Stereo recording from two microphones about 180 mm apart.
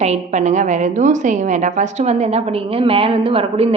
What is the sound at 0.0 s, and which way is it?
A woman's voice, 40° right (ahead or behind).